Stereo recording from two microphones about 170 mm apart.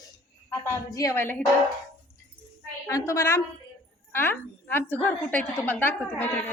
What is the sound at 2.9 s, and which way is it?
A woman's voice, 20° left (ahead or behind).